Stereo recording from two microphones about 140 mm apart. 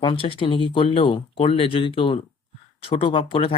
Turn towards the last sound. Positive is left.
turn(degrees=40)  # may be behind; listen again after turning